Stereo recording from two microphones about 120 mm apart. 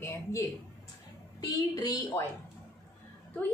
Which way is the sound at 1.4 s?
30° left (ahead or behind).